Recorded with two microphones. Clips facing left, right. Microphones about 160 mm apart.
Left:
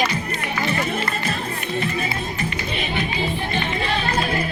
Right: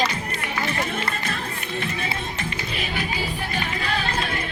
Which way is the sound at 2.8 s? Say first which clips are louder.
Left 3 dB; 5° right (ahead or behind).